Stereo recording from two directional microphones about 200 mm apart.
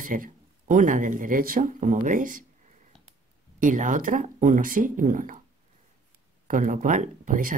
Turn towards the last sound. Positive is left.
turn(degrees=-40)  # may be behind; listen again after turning